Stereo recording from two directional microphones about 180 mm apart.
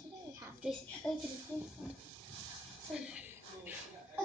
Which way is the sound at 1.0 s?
5° left (ahead or behind).